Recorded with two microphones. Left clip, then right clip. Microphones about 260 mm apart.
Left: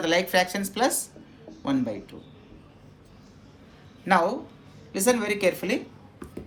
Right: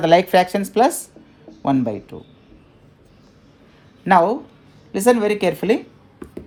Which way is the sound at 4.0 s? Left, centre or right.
Right.